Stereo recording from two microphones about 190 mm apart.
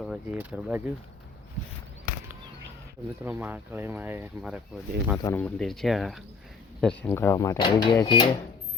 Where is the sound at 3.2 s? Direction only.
10° right (ahead or behind).